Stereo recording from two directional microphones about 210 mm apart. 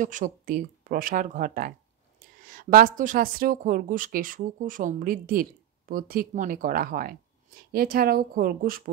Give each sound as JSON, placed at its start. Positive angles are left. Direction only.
{"t": 0.0, "sound": "speech", "side_deg": -40}